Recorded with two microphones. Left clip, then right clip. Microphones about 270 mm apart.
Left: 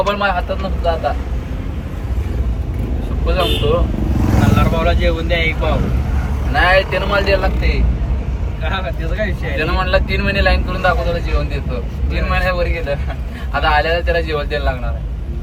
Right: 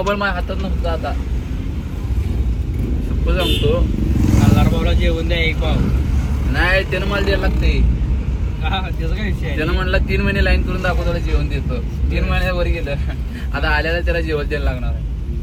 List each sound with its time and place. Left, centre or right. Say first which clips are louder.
0.0 s speech: left 3 dB; centre
3.2 s speech: left 2 dB; centre
9.1 s speech: left 5 dB; centre